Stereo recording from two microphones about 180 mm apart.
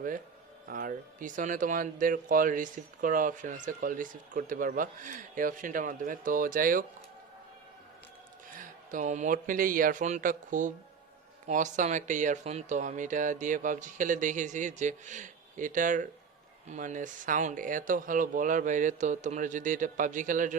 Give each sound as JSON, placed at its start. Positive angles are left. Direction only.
{"t": 0.7, "sound": "speech", "side_deg": -50}
{"t": 8.5, "sound": "speech", "side_deg": -45}